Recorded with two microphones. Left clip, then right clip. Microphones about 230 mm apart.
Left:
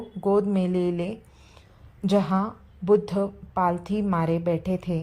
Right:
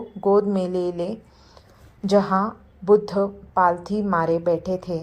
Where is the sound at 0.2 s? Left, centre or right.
Left.